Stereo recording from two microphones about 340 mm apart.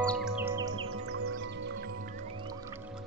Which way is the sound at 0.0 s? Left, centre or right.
Centre.